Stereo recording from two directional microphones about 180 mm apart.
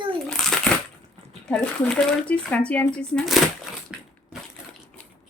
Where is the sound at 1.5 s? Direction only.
5° left (ahead or behind).